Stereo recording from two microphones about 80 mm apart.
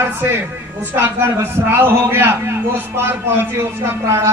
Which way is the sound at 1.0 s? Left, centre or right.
Right.